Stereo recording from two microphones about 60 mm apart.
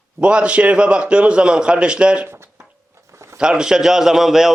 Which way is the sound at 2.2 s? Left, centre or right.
Right.